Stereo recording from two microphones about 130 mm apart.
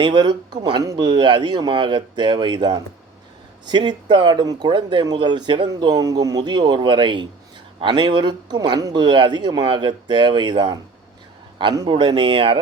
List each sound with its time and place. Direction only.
0.0 s speech: 35° right (ahead or behind)